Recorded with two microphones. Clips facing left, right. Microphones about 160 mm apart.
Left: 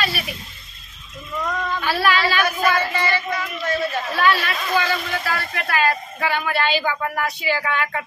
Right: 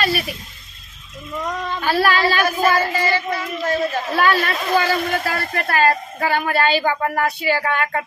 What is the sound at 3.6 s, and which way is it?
A man's voice, 40° right (ahead or behind).